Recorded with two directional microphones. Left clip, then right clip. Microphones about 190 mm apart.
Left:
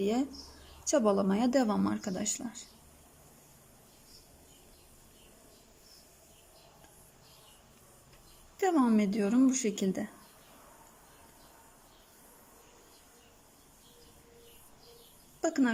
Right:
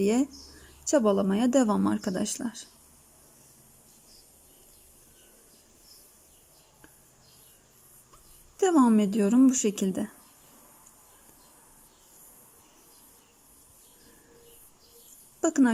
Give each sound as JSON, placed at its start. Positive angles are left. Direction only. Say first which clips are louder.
{"t": 0.0, "sound": "speech", "louder": "right 6 dB", "side_deg": -20}
{"t": 8.5, "sound": "speech", "louder": "right 5 dB", "side_deg": -20}
{"t": 9.8, "sound": "speech", "louder": "right 3 dB", "side_deg": 0}
{"t": 15.4, "sound": "a sound", "louder": "right 6 dB", "side_deg": -20}